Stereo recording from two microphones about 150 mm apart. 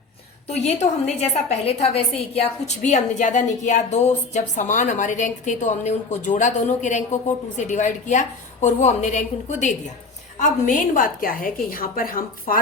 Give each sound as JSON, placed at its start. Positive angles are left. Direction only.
{"t": 0.4, "sound": "a woman's voice", "side_deg": 45}